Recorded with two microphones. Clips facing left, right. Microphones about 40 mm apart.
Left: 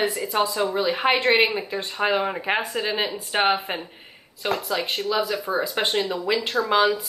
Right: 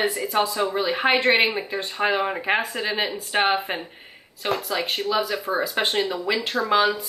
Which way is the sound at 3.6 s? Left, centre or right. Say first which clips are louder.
Right 1 dB; right.